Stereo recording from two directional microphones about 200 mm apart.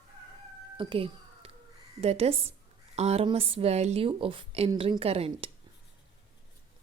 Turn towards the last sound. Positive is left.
turn(degrees=-30)  # may be behind; listen again after turning